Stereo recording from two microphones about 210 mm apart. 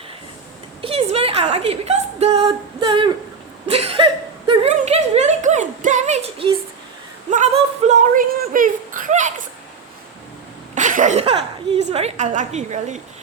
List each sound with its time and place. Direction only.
0.8 s a woman's voice: 25° right (ahead or behind)
3.7 s a sound: 30° right (ahead or behind)
10.8 s a woman's voice: 35° right (ahead or behind)